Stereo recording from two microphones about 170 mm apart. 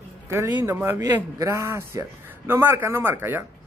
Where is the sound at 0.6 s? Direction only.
10° right (ahead or behind).